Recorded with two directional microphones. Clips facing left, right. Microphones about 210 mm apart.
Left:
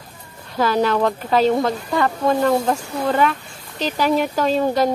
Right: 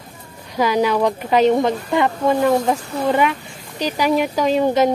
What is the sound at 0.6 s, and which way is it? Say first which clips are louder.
Speech: right 1 dB; 15° right (ahead or behind).